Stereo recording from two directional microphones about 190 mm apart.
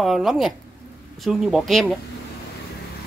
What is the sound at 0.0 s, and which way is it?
Speech, centre (ahead or behind).